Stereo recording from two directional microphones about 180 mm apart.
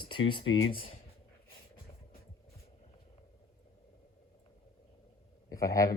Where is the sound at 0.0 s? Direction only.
25° left (ahead or behind).